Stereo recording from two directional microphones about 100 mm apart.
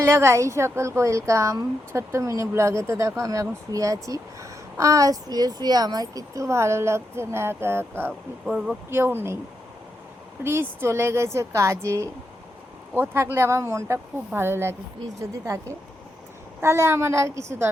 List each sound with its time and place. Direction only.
0.0 s speech: 25° right (ahead or behind)
8.4 s speech: 5° right (ahead or behind)
8.9 s speech: 20° right (ahead or behind)
10.4 s a woman's voice: 25° right (ahead or behind)